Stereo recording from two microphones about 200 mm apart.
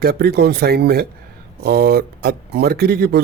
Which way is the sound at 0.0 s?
50° right (ahead or behind).